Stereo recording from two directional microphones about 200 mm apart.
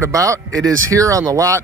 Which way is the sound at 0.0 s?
15° right (ahead or behind).